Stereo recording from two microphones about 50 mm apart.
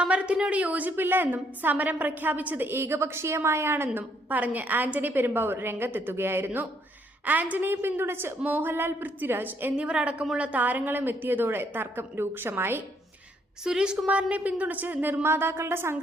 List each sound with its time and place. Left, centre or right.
0.0 s a woman's voice: right
2.6 s a woman's voice: right
4.3 s a woman's voice: right
7.3 s a woman's voice: right
7.6 s a woman's voice: right
9.7 s a woman's voice: right
13.7 s a woman's voice: centre; by 16.0 s right